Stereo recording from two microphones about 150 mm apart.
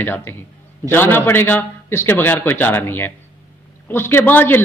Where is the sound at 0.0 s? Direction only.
15° left (ahead or behind).